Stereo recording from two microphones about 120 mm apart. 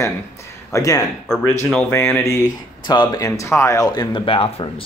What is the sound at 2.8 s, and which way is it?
Speech, 40° left (ahead or behind).